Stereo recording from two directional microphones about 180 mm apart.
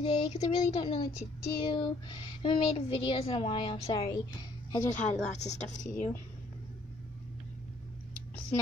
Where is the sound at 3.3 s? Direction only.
30° left (ahead or behind).